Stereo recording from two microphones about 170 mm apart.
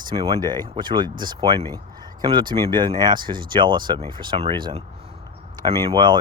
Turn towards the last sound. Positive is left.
turn(degrees=-25)  # may be behind; listen again after turning